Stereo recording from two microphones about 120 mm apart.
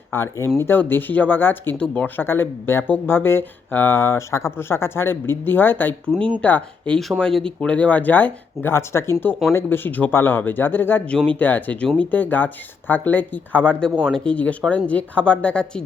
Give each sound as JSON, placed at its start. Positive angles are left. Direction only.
{"t": 0.1, "sound": "speech", "side_deg": 20}